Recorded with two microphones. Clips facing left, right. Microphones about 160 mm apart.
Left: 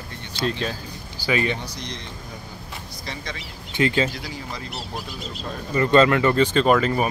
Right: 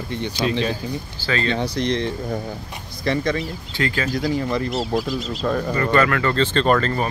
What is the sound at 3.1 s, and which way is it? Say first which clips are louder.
Speech: right 14 dB; 50° right (ahead or behind).